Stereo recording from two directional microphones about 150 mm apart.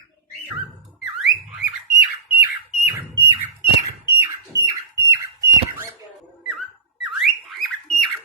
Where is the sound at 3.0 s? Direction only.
20° right (ahead or behind).